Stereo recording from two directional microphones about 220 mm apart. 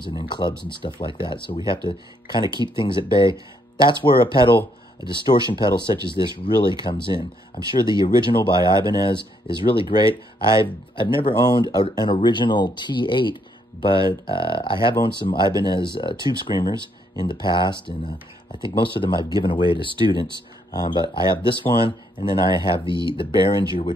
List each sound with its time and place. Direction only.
0.0 s speech: 20° left (ahead or behind)
9.5 s speech: 5° left (ahead or behind)
9.8 s speech: 20° left (ahead or behind)